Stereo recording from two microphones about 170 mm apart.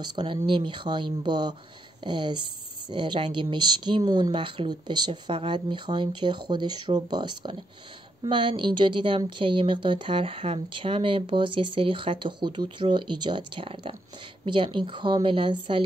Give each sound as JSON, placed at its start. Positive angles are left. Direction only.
{"t": 0.0, "sound": "a woman's voice", "side_deg": -30}